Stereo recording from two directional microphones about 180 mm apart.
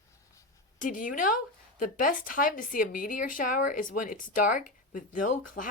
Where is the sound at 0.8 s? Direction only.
50° left (ahead or behind).